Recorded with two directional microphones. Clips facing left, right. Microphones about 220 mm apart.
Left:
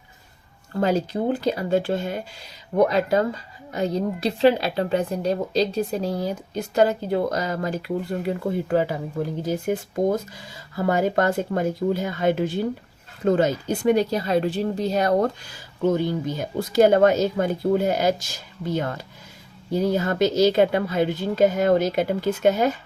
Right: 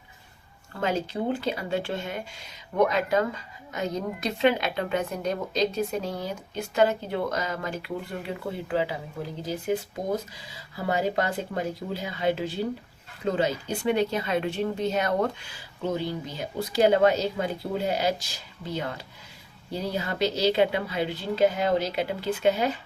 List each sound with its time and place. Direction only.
0.7 s speech: 35° left (ahead or behind)